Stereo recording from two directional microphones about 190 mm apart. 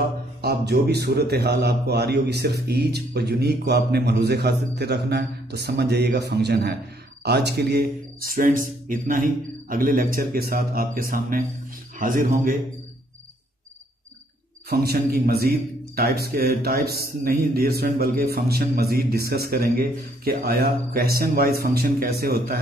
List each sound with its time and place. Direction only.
0.4 s a man's voice: 60° right (ahead or behind)
14.7 s a man's voice: 55° right (ahead or behind)